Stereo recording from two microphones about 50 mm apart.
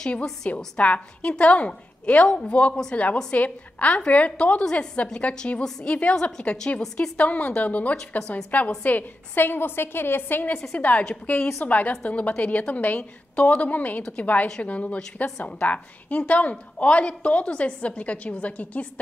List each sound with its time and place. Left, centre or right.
0.4 s a woman's voice: left
2.7 s a woman's voice: centre
3.3 s a woman's voice: left
5.9 s a woman's voice: left
6.3 s a woman's voice: centre
7.2 s a woman's voice: left
10.7 s a woman's voice: left